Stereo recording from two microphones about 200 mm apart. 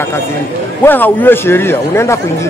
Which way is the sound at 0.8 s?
10° left (ahead or behind).